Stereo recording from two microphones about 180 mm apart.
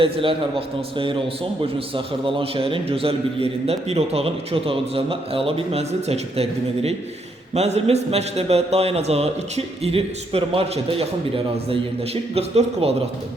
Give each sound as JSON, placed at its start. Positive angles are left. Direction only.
{"t": 0.0, "sound": "a man's voice", "side_deg": -30}
{"t": 2.2, "sound": "a man's voice", "side_deg": -30}
{"t": 12.3, "sound": "a man's voice", "side_deg": -35}